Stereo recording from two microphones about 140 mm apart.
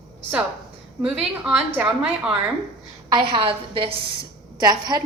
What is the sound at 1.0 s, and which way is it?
Speech, 5° right (ahead or behind).